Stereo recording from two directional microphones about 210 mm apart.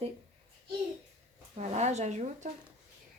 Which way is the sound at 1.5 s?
35° right (ahead or behind).